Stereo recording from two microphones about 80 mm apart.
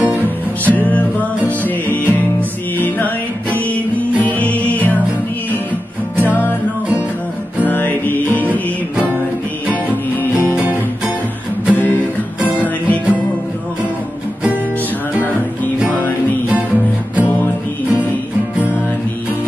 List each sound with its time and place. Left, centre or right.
0.7 s music: centre
4.2 s music: left
7.6 s music: left
11.7 s music: left
16.4 s music: right